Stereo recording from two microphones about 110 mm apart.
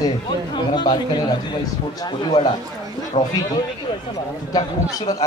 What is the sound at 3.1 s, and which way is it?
Speech, 80° left.